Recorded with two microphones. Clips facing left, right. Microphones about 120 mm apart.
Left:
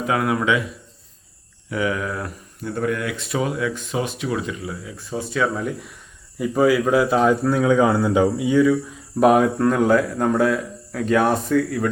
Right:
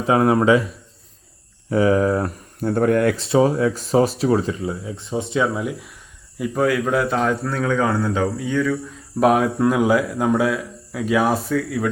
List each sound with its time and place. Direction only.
0.0 s speech: 30° right (ahead or behind)
1.7 s speech: 35° right (ahead or behind)
2.6 s speech: 45° right (ahead or behind)
3.2 s speech: 30° right (ahead or behind)
5.5 s a man's voice: 5° right (ahead or behind)